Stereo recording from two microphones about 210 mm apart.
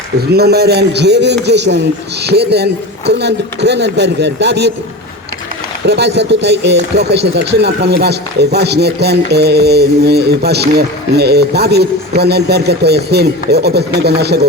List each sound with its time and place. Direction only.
0.3 s speech: 50° right (ahead or behind)
5.8 s speech: 55° right (ahead or behind)